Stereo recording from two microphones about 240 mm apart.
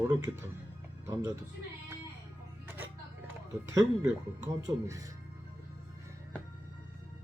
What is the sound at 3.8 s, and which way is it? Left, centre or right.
Speech, centre.